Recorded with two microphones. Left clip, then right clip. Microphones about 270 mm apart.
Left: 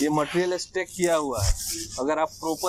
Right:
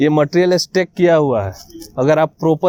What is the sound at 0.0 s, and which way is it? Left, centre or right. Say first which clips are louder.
Speech: right 10 dB; right.